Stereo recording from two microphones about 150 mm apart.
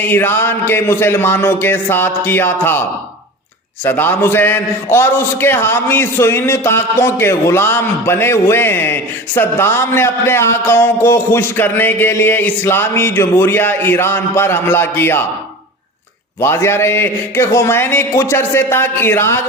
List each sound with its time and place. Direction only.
0.0 s a man's voice: 15° left (ahead or behind)
3.8 s a man's voice: 15° left (ahead or behind)
16.4 s a man's voice: 15° left (ahead or behind)